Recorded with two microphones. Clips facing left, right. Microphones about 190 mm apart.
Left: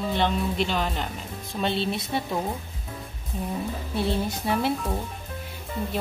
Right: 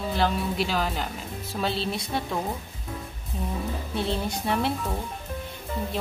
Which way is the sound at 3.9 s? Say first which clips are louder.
Left 2 dB; centre (ahead or behind).